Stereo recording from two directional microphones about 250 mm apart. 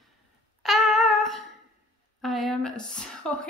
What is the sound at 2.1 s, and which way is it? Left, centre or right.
Speech, centre.